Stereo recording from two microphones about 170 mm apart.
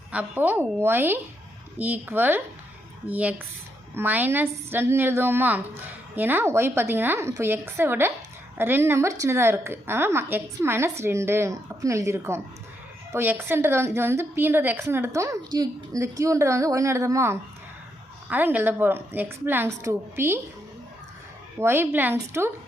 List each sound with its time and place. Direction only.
0.1 s a woman's voice: 10° right (ahead or behind)
21.6 s a woman's voice: 15° right (ahead or behind)